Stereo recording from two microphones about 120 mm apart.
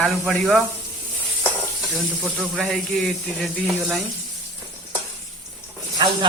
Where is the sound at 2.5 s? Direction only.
5° left (ahead or behind).